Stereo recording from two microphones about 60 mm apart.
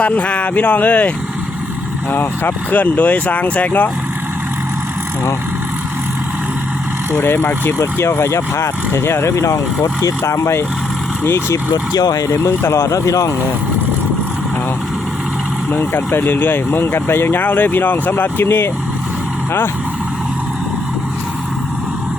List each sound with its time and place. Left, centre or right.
0.0 s speech: left
2.1 s speech: left
7.2 s speech: left
11.7 s speech: left
12.5 s speech: left
15.7 s speech: left